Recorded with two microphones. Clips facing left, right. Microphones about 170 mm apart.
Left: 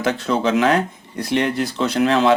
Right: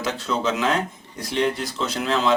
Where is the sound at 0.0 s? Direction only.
60° left (ahead or behind).